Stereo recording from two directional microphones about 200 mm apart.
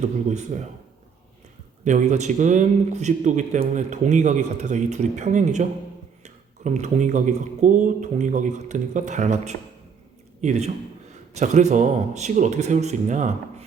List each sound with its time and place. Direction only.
0.3 s a man's voice: 35° right (ahead or behind)
1.8 s a man's voice: 35° right (ahead or behind)